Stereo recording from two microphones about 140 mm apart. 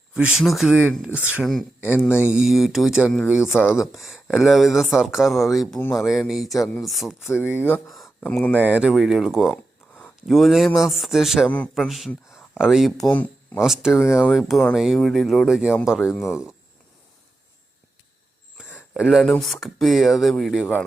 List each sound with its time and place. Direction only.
0.1 s speech: 5° right (ahead or behind)
7.3 s speech: 15° left (ahead or behind)
8.6 s speech: 10° right (ahead or behind)
13.1 s speech: 10° left (ahead or behind)
13.6 s speech: 5° right (ahead or behind)
16.1 s speech: 20° left (ahead or behind)
18.9 s speech: 5° right (ahead or behind)